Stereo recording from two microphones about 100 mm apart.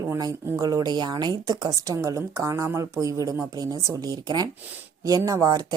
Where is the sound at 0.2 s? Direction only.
35° right (ahead or behind).